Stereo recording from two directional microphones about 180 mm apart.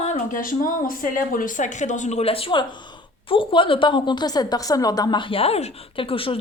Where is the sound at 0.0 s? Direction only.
45° left (ahead or behind).